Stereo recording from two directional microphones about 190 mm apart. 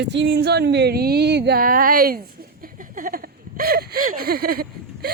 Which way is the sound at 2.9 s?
45° right (ahead or behind).